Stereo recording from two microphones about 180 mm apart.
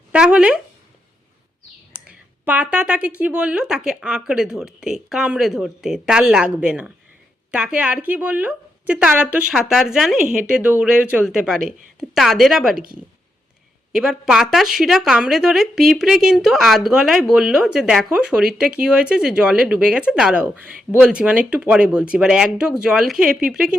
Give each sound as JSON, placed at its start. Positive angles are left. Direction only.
{"t": 0.1, "sound": "speech", "side_deg": -5}
{"t": 2.0, "sound": "speech", "side_deg": -10}